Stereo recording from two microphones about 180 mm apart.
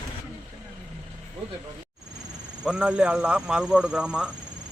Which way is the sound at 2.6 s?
5° right (ahead or behind).